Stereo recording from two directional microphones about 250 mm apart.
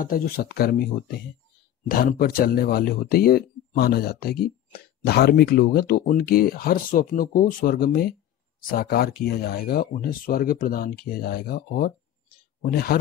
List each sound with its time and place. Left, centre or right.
0.0 s speech: left
1.9 s speech: left